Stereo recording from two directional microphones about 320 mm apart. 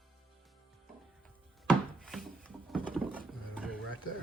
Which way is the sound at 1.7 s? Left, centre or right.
Centre.